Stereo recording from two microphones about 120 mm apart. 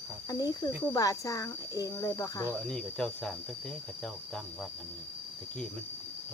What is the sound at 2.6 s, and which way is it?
Speech, 5° left (ahead or behind).